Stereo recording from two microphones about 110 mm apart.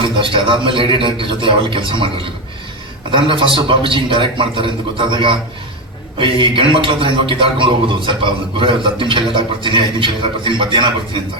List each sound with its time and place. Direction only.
0.0 s a man's voice: 55° right (ahead or behind)
3.1 s a man's voice: 50° right (ahead or behind)